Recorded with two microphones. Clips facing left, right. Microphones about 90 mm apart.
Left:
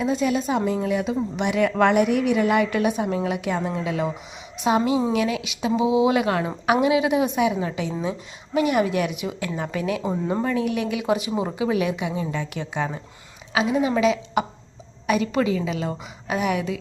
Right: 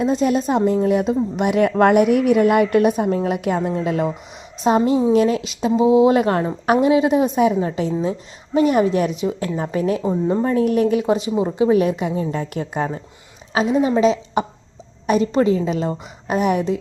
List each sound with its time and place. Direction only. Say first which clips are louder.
0.0 s a woman's voice: right 4 dB; 45° right (ahead or behind)
4.7 s a woman's voice: right 5 dB; 40° right (ahead or behind)
10.0 s speech: right 5 dB; 10° left (ahead or behind)
10.4 s a woman's voice: right 7 dB; 40° right (ahead or behind)